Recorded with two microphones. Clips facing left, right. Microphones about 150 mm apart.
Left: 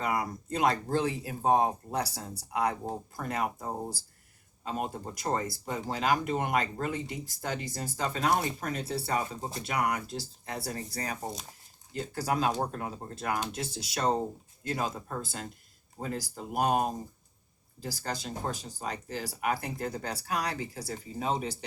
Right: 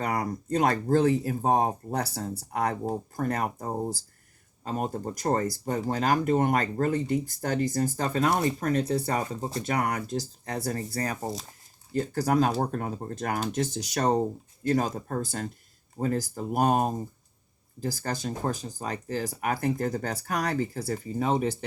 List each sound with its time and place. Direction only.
0.0 s speech: 45° right (ahead or behind)
4.6 s speech: 45° right (ahead or behind)